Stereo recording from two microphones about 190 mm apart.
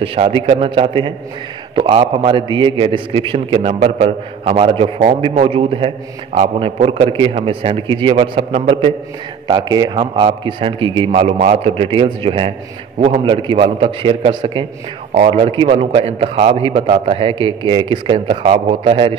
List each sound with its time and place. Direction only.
0.0 s a man's voice: 30° right (ahead or behind)